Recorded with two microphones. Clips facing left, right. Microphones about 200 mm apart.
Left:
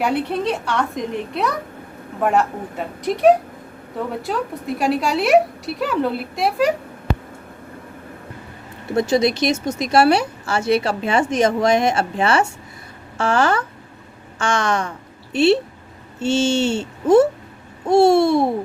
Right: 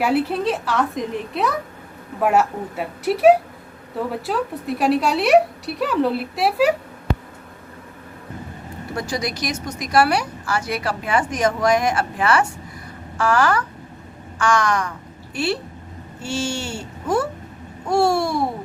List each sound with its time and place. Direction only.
0.0 s a woman's voice: 5° right (ahead or behind)
9.0 s a woman's voice: 25° left (ahead or behind)